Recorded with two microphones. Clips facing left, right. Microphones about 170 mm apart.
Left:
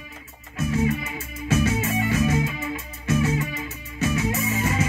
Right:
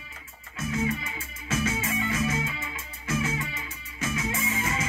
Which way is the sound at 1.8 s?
35° left (ahead or behind).